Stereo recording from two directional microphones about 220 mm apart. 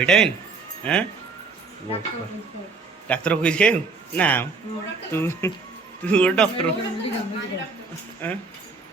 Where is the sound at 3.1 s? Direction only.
5° left (ahead or behind).